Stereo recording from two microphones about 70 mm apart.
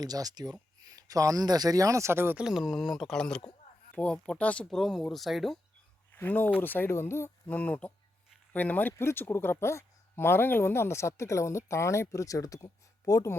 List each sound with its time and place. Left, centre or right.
0.0 s speech: right
2.3 s speech: centre
4.7 s speech: centre
6.1 s speech: left
7.4 s speech: left